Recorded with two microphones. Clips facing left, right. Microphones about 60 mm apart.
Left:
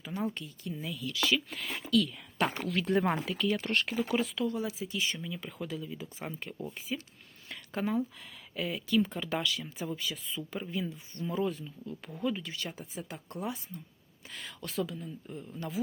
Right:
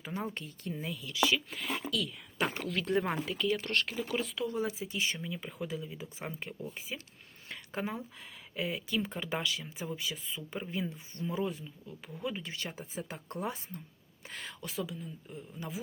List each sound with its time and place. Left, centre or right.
0.0 s speech: right
1.3 s speech: centre
3.6 s speech: centre
4.2 s speech: centre
4.4 s speech: right
7.4 s a sound: right
8.5 s speech: right
12.4 s speech: right
14.6 s speech: centre